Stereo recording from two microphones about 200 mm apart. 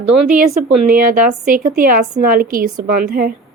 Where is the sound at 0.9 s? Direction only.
45° right (ahead or behind).